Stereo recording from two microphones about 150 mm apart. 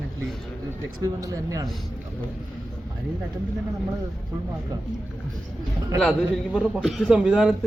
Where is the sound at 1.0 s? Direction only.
25° right (ahead or behind).